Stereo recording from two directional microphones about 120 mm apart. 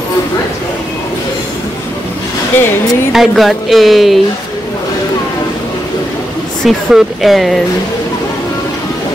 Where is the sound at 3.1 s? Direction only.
Centre (ahead or behind).